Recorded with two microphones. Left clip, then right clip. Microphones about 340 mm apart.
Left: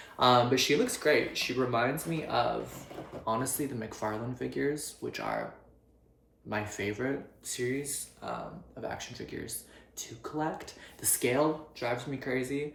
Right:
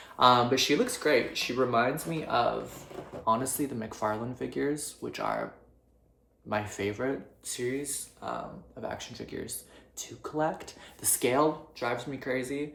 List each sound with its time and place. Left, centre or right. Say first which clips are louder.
0.2 s speech: right 2 dB; centre
6.5 s speech: right 2 dB; centre